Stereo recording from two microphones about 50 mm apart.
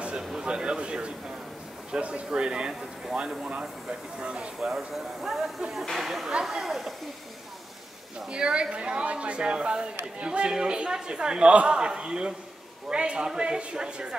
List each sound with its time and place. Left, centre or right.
0.2 s a sound: centre
0.5 s speech: centre
4.6 s speech: centre
8.3 s speech: centre